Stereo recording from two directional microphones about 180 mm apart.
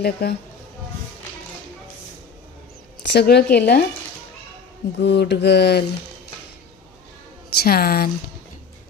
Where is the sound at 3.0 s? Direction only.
70° left (ahead or behind).